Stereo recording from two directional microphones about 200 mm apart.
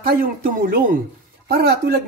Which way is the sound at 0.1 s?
45° right (ahead or behind).